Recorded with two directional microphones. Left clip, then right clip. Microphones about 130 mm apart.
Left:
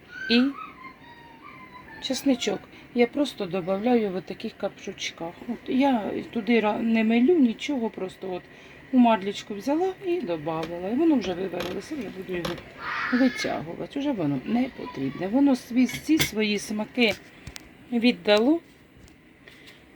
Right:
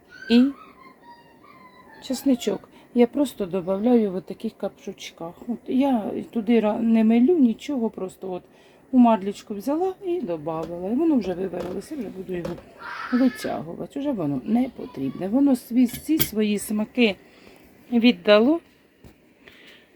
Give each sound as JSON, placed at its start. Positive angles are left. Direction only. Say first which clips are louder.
{"t": 0.3, "sound": "speech", "louder": "right 3 dB", "side_deg": -15}
{"t": 2.0, "sound": "speech", "louder": "right 1 dB", "side_deg": -10}
{"t": 13.1, "sound": "speech", "louder": "right 3 dB", "side_deg": -10}
{"t": 17.9, "sound": "a woman's voice", "louder": "right 4 dB", "side_deg": 5}